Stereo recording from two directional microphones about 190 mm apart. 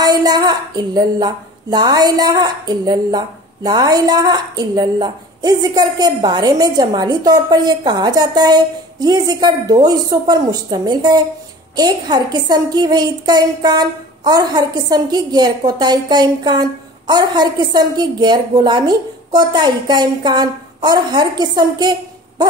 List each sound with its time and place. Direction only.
0.0 s a woman's voice: 20° right (ahead or behind)